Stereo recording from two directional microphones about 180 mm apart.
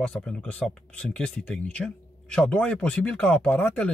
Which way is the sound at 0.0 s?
5° left (ahead or behind).